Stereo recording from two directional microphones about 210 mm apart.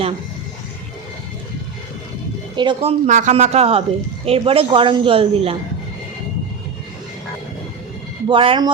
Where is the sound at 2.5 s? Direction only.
20° right (ahead or behind).